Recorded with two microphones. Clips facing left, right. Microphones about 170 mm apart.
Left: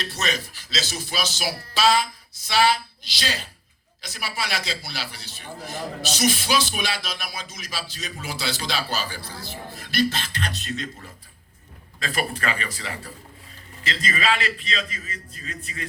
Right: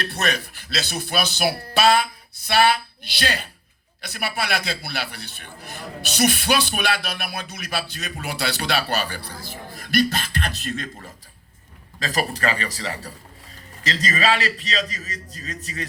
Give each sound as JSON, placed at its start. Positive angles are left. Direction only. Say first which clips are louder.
{"t": 0.0, "sound": "a man's voice", "louder": "right 3 dB", "side_deg": -60}
{"t": 11.9, "sound": "a man's voice", "louder": "right 2 dB", "side_deg": -40}